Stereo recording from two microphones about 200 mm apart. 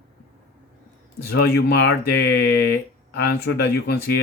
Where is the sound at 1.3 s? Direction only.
50° left (ahead or behind).